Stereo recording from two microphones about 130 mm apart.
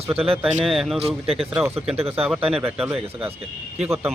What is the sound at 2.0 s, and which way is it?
Speech, 50° right (ahead or behind).